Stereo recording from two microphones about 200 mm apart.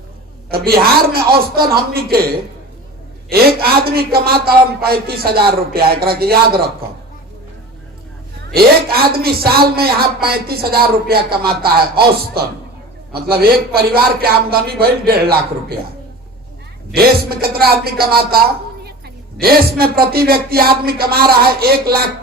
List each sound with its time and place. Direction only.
0.5 s a man's voice: 50° right (ahead or behind)
8.5 s a man's voice: 50° right (ahead or behind)
16.9 s a man's voice: 50° right (ahead or behind)